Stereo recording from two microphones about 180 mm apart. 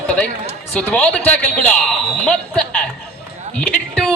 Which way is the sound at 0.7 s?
10° left (ahead or behind).